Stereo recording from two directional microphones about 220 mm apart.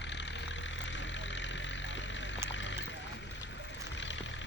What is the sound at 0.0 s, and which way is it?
Music, 55° left (ahead or behind).